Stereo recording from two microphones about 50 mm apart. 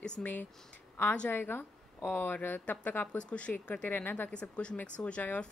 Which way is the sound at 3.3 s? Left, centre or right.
Left.